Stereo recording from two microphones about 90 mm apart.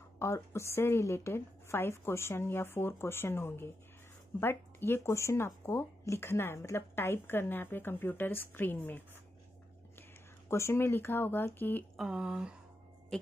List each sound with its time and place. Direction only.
0.2 s speech: 30° left (ahead or behind)
10.5 s speech: 30° left (ahead or behind)
12.0 s a sound: 5° right (ahead or behind)